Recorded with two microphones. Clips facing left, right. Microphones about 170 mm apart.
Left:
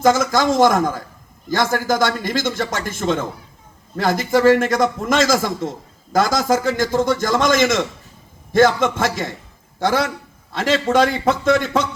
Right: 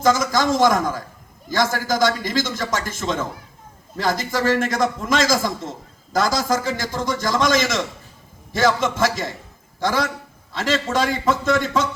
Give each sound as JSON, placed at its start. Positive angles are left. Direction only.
{"t": 0.0, "sound": "a man's voice", "side_deg": 50}